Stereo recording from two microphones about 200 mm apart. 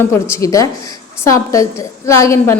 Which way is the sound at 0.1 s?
15° left (ahead or behind).